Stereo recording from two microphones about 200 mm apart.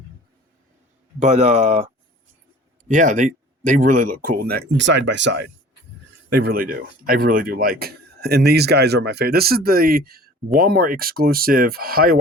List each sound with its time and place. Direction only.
1.2 s speech: 35° right (ahead or behind); by 5.5 s 60° right (ahead or behind)
6.3 s speech: 50° right (ahead or behind)